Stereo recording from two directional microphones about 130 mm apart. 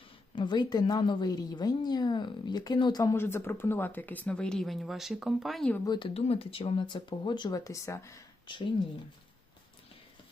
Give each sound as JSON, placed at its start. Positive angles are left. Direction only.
{"t": 0.3, "sound": "a woman's voice", "side_deg": 35}
{"t": 3.2, "sound": "speech", "side_deg": 20}
{"t": 5.8, "sound": "a woman's voice", "side_deg": 35}
{"t": 6.1, "sound": "a woman's voice", "side_deg": 50}
{"t": 8.5, "sound": "a woman's voice", "side_deg": 40}